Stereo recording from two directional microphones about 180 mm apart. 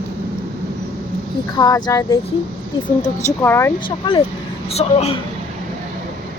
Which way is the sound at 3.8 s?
25° left (ahead or behind).